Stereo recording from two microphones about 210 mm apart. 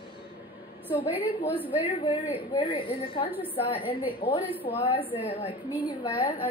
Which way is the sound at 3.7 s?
25° left (ahead or behind).